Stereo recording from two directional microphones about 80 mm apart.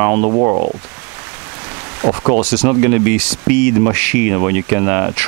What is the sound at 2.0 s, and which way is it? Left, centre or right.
Speech, centre.